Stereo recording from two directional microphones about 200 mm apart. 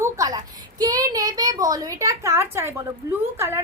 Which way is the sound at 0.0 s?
15° right (ahead or behind).